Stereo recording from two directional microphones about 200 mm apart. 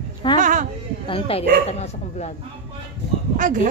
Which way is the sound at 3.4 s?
40° right (ahead or behind).